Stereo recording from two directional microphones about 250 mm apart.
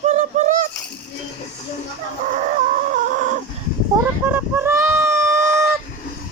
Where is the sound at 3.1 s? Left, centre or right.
Right.